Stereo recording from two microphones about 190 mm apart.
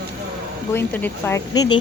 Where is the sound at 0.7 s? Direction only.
10° left (ahead or behind).